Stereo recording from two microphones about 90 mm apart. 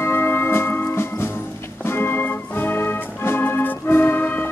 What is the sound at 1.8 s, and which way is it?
Organ, 25° left (ahead or behind).